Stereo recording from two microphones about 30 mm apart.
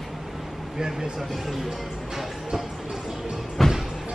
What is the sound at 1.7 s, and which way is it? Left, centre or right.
Music, centre.